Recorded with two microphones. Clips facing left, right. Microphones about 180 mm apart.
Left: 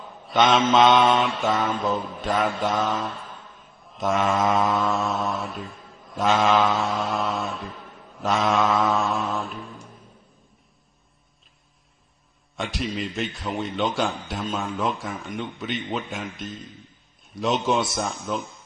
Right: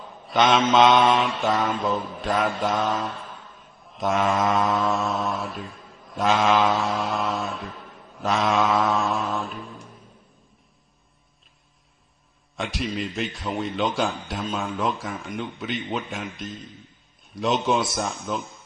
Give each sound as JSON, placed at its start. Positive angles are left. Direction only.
{"t": 0.3, "sound": "mantra", "side_deg": 0}
{"t": 8.9, "sound": "a sound", "side_deg": 0}
{"t": 12.5, "sound": "mantra", "side_deg": 0}